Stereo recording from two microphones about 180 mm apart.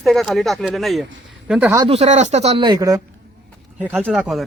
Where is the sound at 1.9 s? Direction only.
40° right (ahead or behind); by 3.0 s 20° right (ahead or behind).